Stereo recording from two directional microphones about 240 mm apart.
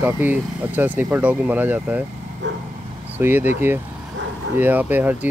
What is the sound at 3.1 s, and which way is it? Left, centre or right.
Speech, centre.